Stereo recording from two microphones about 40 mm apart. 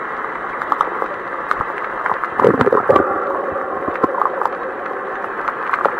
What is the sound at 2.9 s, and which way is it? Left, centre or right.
Gurgling, centre.